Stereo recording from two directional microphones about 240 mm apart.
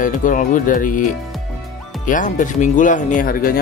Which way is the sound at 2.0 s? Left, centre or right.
Left.